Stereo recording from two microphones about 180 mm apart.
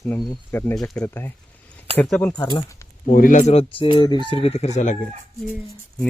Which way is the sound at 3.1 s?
50° left (ahead or behind).